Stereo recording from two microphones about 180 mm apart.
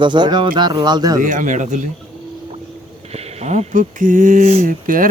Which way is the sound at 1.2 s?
45° right (ahead or behind).